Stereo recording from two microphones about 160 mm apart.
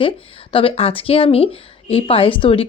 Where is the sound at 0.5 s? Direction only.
35° left (ahead or behind).